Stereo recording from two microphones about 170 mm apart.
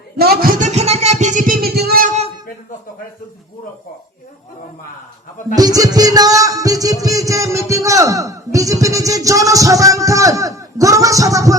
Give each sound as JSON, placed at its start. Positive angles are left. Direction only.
{"t": 0.2, "sound": "speech", "side_deg": -65}
{"t": 0.6, "sound": "a sound", "side_deg": -40}
{"t": 5.5, "sound": "music", "side_deg": -20}